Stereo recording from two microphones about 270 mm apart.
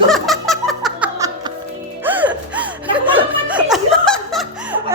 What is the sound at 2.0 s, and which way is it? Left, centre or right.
Music, centre.